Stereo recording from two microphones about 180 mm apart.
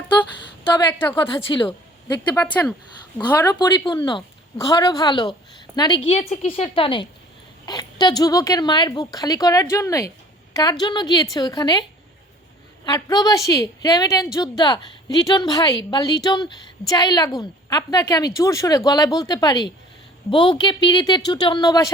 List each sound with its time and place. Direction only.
0.6 s a woman's voice: 25° left (ahead or behind)
0.9 s a woman's voice: 15° left (ahead or behind)
1.5 s a woman's voice: 25° left (ahead or behind)
2.4 s a woman's voice: 10° left (ahead or behind)
3.2 s a woman's voice: 20° left (ahead or behind)